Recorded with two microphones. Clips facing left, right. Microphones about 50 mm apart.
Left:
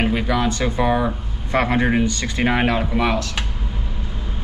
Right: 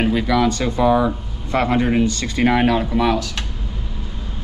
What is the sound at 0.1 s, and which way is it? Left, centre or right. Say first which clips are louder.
Speech: right 3 dB; left.